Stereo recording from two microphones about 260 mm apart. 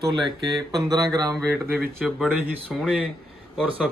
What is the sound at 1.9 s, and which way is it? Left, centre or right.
Speech, centre.